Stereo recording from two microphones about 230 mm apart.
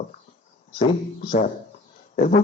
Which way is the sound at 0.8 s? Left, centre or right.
Left.